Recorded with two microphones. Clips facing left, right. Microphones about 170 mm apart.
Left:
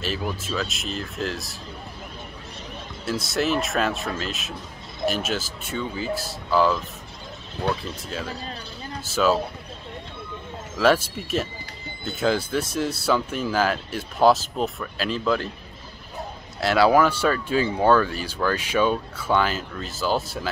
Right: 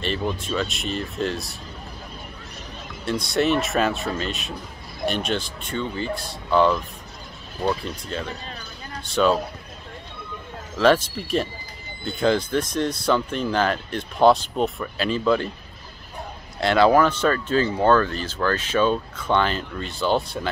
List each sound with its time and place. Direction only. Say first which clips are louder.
0.0 s speech: right 3 dB; 5° left (ahead or behind)
3.1 s speech: right 3 dB; centre (ahead or behind)
10.8 s speech: right 2 dB; 5° left (ahead or behind)
16.5 s speech: right 1 dB; 5° left (ahead or behind)